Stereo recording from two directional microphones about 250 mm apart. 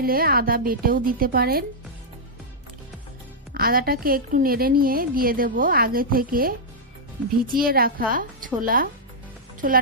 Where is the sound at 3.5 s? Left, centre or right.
Right.